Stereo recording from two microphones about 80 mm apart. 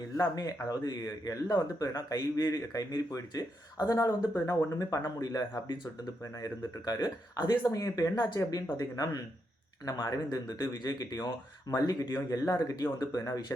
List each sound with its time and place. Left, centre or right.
0.3 s speech: left
6.4 s speech: left
8.1 s speech: left